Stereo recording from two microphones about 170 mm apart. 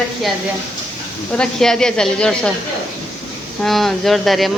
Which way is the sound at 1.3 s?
5° left (ahead or behind).